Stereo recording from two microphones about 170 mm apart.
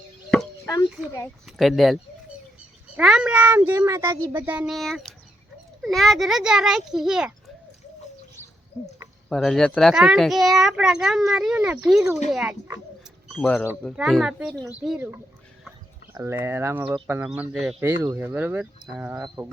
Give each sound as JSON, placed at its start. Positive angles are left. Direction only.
{"t": 0.6, "sound": "a child's voice", "side_deg": 15}
{"t": 1.5, "sound": "speech", "side_deg": 0}
{"t": 8.8, "sound": "speech", "side_deg": 10}
{"t": 13.8, "sound": "speech", "side_deg": 0}
{"t": 17.8, "sound": "speech", "side_deg": -15}